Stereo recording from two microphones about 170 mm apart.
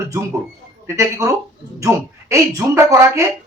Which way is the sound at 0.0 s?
15° right (ahead or behind).